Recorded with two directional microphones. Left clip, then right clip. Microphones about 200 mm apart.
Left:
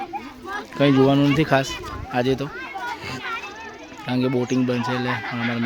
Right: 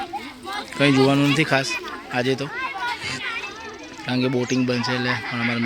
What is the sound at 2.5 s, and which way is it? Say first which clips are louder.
Children playing: right 4 dB; 50° left (ahead or behind).